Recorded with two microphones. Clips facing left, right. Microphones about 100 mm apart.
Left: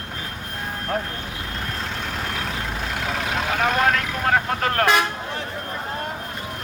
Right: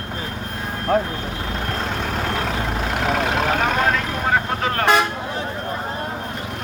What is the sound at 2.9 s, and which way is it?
Vehicle, 55° right (ahead or behind).